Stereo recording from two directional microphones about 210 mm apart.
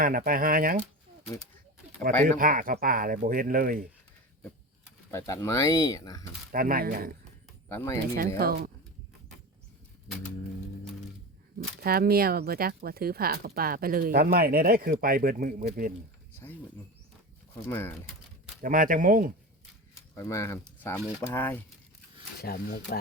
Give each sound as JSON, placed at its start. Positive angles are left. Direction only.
{"t": 0.0, "sound": "speech", "side_deg": -40}
{"t": 2.4, "sound": "speech", "side_deg": -40}
{"t": 5.1, "sound": "speech", "side_deg": 15}
{"t": 6.5, "sound": "speech", "side_deg": -45}
{"t": 7.7, "sound": "speech", "side_deg": 10}
{"t": 8.4, "sound": "speech", "side_deg": -45}
{"t": 11.8, "sound": "speech", "side_deg": -45}
{"t": 16.3, "sound": "a sound", "side_deg": 10}
{"t": 17.5, "sound": "speech", "side_deg": 10}
{"t": 18.6, "sound": "speech", "side_deg": -40}
{"t": 20.1, "sound": "speech", "side_deg": 15}
{"t": 22.4, "sound": "speech", "side_deg": 45}